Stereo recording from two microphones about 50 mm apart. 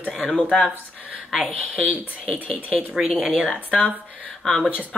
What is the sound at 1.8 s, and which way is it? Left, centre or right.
Speech, right.